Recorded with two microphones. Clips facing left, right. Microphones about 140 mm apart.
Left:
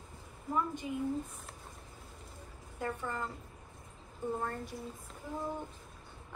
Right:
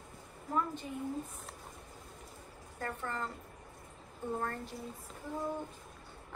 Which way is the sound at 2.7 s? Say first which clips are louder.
Left 2 dB; 10° left (ahead or behind).